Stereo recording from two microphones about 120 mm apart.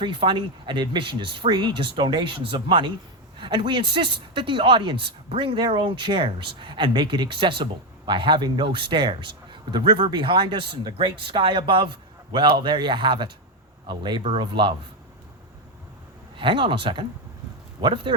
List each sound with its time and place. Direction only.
0.0 s speech: 45° right (ahead or behind)
16.4 s speech: 45° right (ahead or behind)